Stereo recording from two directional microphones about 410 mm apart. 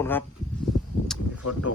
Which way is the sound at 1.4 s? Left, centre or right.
Left.